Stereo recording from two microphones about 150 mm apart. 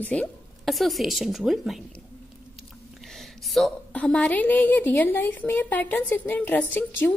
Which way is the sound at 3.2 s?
Centre (ahead or behind).